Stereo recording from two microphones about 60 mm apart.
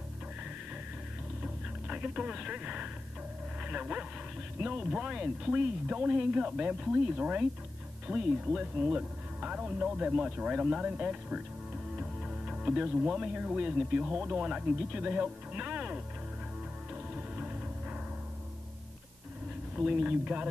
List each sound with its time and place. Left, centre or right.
1.4 s radio: centre
3.6 s speech: centre
12.0 s music: centre
13.1 s speech: centre
16.9 s music: right
19.7 s speech: centre